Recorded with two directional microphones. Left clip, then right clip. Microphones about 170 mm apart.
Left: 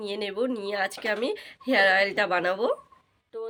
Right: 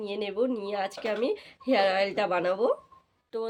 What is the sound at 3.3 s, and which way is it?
Speech, 60° right (ahead or behind).